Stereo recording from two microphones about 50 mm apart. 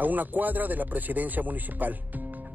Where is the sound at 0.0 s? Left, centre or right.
Right.